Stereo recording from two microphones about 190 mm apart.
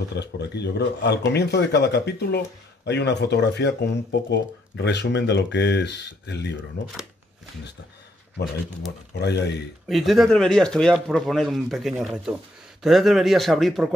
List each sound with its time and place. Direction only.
0.1 s speech: 65° left (ahead or behind)
9.2 s speech: 65° left (ahead or behind)
9.8 s speech: centre (ahead or behind)